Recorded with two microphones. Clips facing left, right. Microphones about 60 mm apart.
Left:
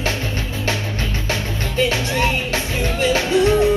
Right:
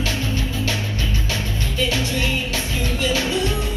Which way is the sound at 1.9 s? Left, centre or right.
Left.